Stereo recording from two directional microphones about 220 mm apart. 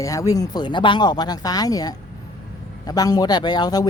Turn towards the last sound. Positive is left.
turn(degrees=20)  # may be behind; listen again after turning